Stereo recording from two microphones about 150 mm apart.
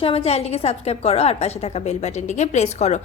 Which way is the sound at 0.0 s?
40° left (ahead or behind).